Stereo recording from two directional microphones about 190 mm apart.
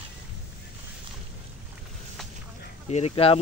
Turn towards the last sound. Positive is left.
turn(degrees=30)  # may be behind; listen again after turning